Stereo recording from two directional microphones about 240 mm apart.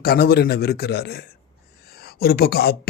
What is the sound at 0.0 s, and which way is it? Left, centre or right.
Speech, left.